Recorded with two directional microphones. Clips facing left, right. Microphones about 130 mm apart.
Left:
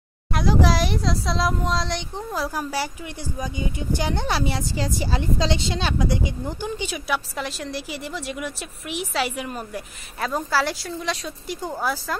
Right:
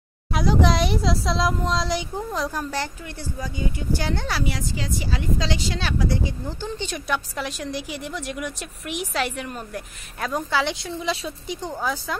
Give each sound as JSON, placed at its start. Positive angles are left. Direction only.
{"t": 0.3, "sound": "speech", "side_deg": 0}
{"t": 2.4, "sound": "speech", "side_deg": 10}
{"t": 4.4, "sound": "a woman's voice", "side_deg": 30}